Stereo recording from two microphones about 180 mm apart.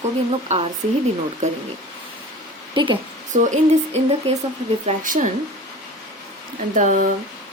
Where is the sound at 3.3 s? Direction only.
40° right (ahead or behind).